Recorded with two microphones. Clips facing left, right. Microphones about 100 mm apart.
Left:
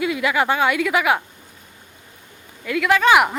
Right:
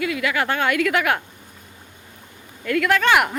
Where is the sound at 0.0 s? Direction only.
20° left (ahead or behind).